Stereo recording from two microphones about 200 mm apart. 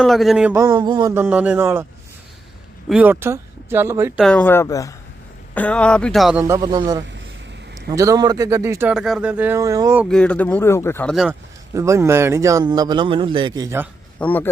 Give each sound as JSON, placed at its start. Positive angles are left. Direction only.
{"t": 0.0, "sound": "speech", "side_deg": 0}
{"t": 1.1, "sound": "speech", "side_deg": -10}
{"t": 2.9, "sound": "speech", "side_deg": -10}
{"t": 4.2, "sound": "speech", "side_deg": 5}
{"t": 6.4, "sound": "a man's voice", "side_deg": -20}
{"t": 10.1, "sound": "speech", "side_deg": 5}
{"t": 11.1, "sound": "speech", "side_deg": 0}
{"t": 11.7, "sound": "speech", "side_deg": -15}
{"t": 14.2, "sound": "speech", "side_deg": 10}